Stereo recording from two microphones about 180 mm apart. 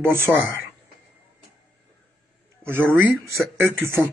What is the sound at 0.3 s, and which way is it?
Speech, 5° right (ahead or behind).